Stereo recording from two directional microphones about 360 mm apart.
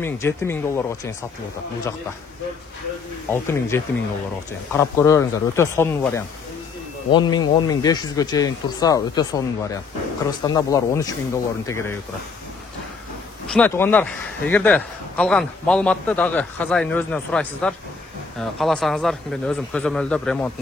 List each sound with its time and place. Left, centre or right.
0.0 s speech: centre
3.3 s speech: centre
13.5 s a man's voice: centre